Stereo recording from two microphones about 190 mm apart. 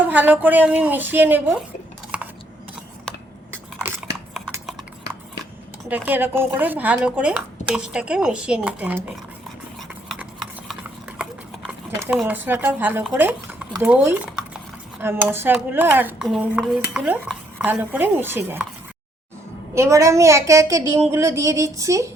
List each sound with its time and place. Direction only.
0.1 s speech: 10° right (ahead or behind)
2.1 s typing: 5° right (ahead or behind)
3.5 s a sound: 5° right (ahead or behind)
5.9 s speech: 10° right (ahead or behind)
11.2 s horse: centre (ahead or behind)
11.9 s speech: 5° right (ahead or behind)
19.7 s speech: 15° right (ahead or behind)